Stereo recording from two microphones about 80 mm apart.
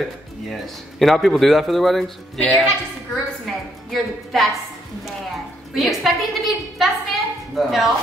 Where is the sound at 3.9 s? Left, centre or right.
Centre.